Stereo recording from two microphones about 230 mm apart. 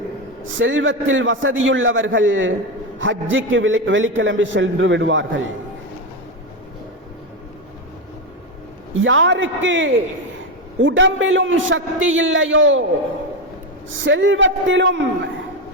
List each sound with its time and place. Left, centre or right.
0.4 s a man's voice: right
9.0 s a man's voice: right
13.9 s a man's voice: right